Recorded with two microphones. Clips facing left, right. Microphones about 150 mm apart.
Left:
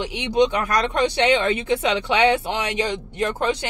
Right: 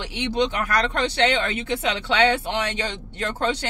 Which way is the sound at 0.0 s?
15° left (ahead or behind).